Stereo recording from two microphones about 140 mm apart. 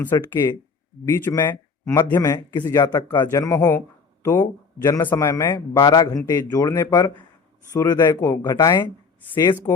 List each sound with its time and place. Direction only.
0.1 s speech: 25° left (ahead or behind)
8.5 s speech: 30° left (ahead or behind)